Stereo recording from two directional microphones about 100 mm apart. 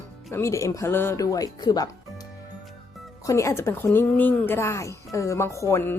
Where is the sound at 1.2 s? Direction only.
35° left (ahead or behind).